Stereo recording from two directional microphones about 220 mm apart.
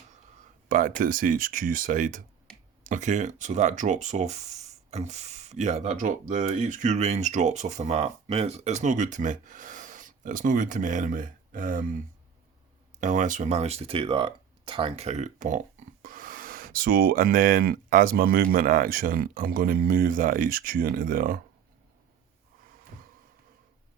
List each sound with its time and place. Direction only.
0.7 s speech: 35° right (ahead or behind)